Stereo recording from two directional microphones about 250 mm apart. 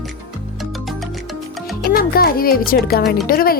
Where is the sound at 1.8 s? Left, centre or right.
Left.